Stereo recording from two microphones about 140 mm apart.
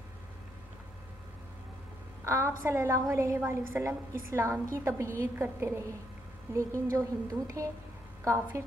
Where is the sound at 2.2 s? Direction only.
20° right (ahead or behind).